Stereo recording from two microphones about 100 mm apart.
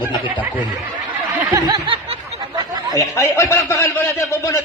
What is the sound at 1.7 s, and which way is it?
Snicker, 65° right (ahead or behind).